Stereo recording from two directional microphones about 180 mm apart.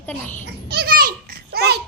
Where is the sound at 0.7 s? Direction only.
60° right (ahead or behind).